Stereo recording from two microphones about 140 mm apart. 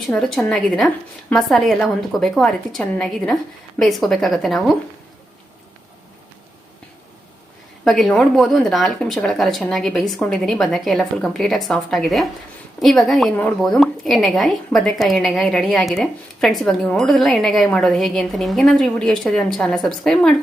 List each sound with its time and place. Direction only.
0.1 s speech: 5° left (ahead or behind)
7.9 s speech: 5° left (ahead or behind)